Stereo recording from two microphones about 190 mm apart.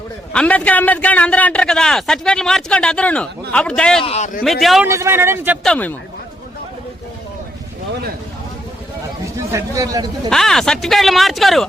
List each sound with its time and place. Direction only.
0.3 s a man's voice: 5° left (ahead or behind)
4.0 s a man's voice: 35° left (ahead or behind)
4.4 s a man's voice: centre (ahead or behind)
4.9 s speech: 15° right (ahead or behind)
5.6 s speech: 5° left (ahead or behind)
9.2 s a man's voice: 15° right (ahead or behind)
10.2 s a man's voice: 5° left (ahead or behind)